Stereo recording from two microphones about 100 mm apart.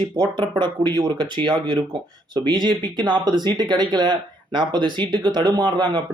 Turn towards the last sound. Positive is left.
turn(degrees=-45)  # may be behind; listen again after turning